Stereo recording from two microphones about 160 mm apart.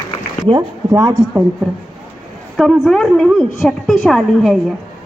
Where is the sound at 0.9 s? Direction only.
20° right (ahead or behind).